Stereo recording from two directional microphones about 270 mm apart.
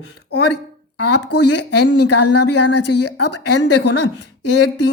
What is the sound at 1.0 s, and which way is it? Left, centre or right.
Speech, left.